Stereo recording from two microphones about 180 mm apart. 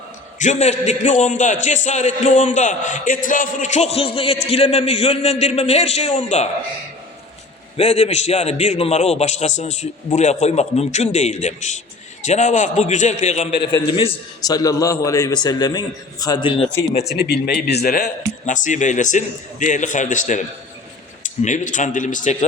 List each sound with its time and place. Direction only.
0.3 s a man's voice: 40° left (ahead or behind)
7.8 s a man's voice: 40° left (ahead or behind)
13.6 s a man's voice: 25° left (ahead or behind)
17.2 s a man's voice: 65° left (ahead or behind); by 22.4 s 45° left (ahead or behind)